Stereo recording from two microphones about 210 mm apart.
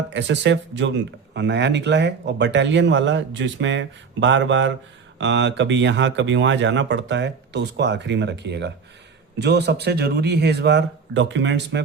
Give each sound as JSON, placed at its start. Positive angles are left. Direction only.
{"t": 0.1, "sound": "speech", "side_deg": -60}